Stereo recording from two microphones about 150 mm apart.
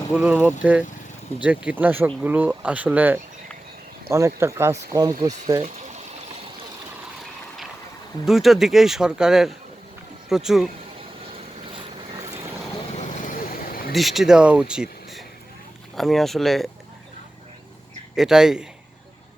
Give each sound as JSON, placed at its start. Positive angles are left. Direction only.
{"t": 0.1, "sound": "speech", "side_deg": -5}
{"t": 5.7, "sound": "water", "side_deg": -50}
{"t": 8.2, "sound": "speech", "side_deg": 0}
{"t": 12.9, "sound": "vehicle", "side_deg": 55}
{"t": 13.9, "sound": "speech", "side_deg": 0}
{"t": 18.2, "sound": "speech", "side_deg": -5}